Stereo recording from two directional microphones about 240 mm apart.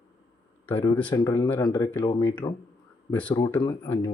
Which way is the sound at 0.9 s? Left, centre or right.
Centre.